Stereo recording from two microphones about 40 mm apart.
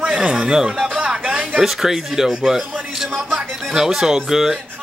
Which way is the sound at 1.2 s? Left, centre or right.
Right.